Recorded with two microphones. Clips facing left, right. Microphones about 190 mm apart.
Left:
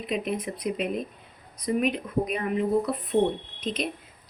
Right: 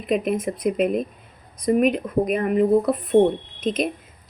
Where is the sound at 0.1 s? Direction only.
50° right (ahead or behind).